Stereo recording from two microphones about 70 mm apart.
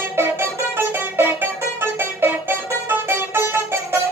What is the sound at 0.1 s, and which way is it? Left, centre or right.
Music, right.